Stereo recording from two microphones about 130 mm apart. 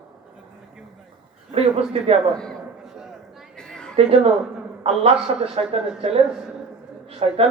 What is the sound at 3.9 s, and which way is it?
A man's voice, 50° right (ahead or behind).